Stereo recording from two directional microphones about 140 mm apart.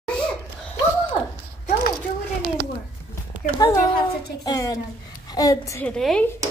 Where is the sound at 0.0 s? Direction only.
5° left (ahead or behind).